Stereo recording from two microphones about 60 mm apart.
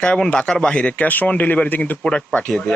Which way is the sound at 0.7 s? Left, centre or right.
Left.